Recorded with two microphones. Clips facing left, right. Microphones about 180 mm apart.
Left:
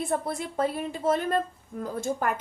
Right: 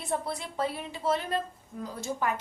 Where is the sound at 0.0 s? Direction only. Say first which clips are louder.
Left 4 dB; 50° left (ahead or behind).